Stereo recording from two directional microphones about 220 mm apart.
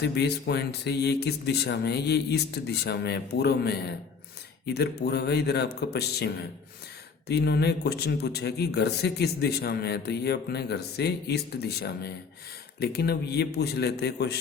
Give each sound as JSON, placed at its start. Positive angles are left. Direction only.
{"t": 0.0, "sound": "speech", "side_deg": 50}